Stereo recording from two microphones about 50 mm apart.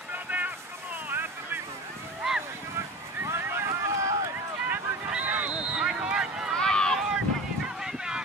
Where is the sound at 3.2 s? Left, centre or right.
Right.